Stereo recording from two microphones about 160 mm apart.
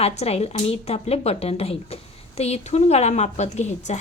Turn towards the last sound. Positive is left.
turn(degrees=45)  # may be behind; listen again after turning